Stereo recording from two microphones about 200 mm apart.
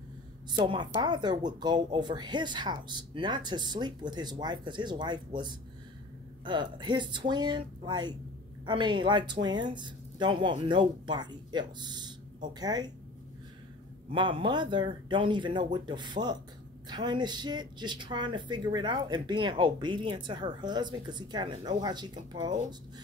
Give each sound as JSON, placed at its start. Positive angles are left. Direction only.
{"t": 0.5, "sound": "speech", "side_deg": -25}
{"t": 14.1, "sound": "speech", "side_deg": -25}